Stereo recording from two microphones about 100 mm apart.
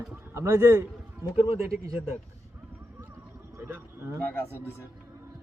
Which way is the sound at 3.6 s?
20° right (ahead or behind).